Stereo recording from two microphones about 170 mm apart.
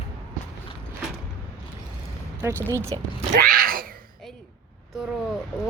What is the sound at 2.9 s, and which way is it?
Speech, 30° right (ahead or behind).